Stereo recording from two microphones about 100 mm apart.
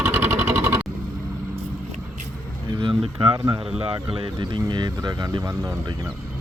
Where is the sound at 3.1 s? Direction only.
45° right (ahead or behind).